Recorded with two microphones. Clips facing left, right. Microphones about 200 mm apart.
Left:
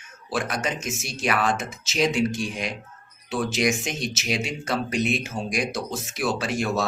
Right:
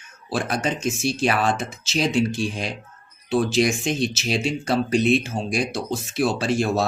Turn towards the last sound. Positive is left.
turn(degrees=-30)  # may be behind; listen again after turning